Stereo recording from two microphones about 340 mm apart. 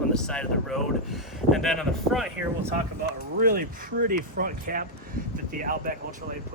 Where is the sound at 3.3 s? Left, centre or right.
Right.